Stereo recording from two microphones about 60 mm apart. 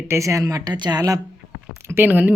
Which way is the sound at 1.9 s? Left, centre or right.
Right.